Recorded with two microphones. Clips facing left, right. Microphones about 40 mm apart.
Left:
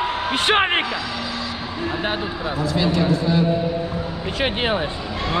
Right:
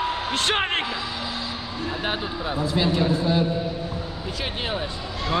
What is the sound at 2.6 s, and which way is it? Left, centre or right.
Speech, right.